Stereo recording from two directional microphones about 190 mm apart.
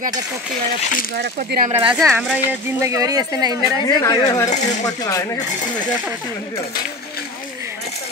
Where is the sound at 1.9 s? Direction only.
5° right (ahead or behind).